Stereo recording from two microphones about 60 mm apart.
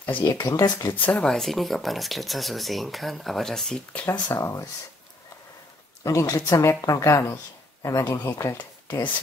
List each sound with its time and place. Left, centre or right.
0.2 s speech: left
0.9 s speech: left
1.2 s speech: centre
3.9 s speech: left
4.4 s speech: left
6.0 s speech: left
8.5 s speech: left